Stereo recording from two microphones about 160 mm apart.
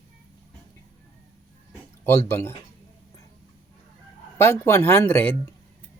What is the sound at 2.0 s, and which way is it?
Speech, 15° left (ahead or behind).